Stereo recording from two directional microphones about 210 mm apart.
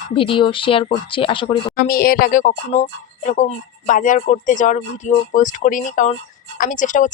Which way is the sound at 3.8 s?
40° left (ahead or behind).